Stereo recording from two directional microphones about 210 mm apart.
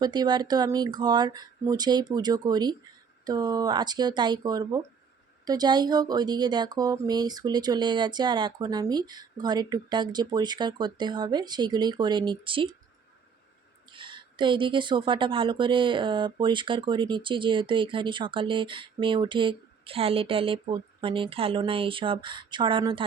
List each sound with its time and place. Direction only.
0.0 s speech: 20° right (ahead or behind)
13.9 s speech: 25° right (ahead or behind)